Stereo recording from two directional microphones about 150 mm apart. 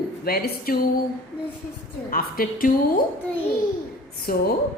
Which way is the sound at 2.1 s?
75° left (ahead or behind).